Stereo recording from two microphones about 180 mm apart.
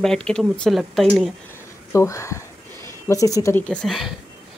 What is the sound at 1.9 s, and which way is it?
Speech, 15° left (ahead or behind).